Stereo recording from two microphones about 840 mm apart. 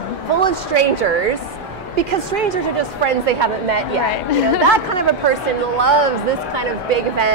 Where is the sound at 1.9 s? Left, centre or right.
Right.